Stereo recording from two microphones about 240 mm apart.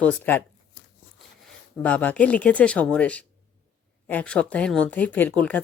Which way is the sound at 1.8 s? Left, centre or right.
Centre.